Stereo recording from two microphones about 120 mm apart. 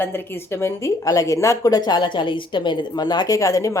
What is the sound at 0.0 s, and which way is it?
A woman's voice, 15° left (ahead or behind).